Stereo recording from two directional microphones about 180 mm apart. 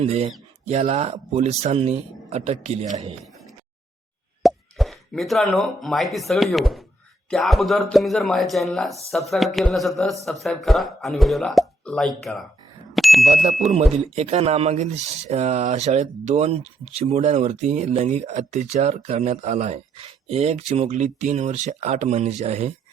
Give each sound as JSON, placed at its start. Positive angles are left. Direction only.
{"t": 0.0, "sound": "speech", "side_deg": -35}
{"t": 4.4, "sound": "speech", "side_deg": 0}
{"t": 12.9, "sound": "bicycle bell", "side_deg": 0}
{"t": 13.3, "sound": "speech", "side_deg": -35}